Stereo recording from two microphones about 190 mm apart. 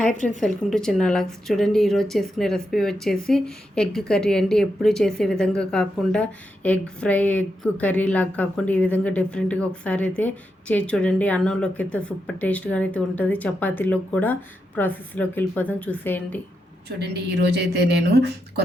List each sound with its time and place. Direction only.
0.3 s a woman's voice: centre (ahead or behind)
17.0 s speech: 60° right (ahead or behind)